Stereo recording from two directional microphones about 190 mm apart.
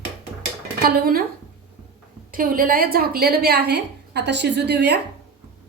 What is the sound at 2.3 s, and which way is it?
A woman's voice, 50° right (ahead or behind).